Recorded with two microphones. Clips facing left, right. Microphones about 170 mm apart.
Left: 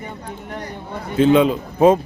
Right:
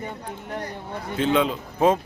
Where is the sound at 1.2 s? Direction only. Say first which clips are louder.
Left 8 dB; 10° left (ahead or behind).